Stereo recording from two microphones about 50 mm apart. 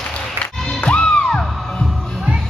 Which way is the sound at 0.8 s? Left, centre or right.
Left.